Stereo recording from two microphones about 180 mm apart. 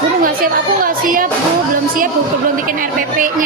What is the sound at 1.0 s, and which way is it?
Speech, 50° right (ahead or behind).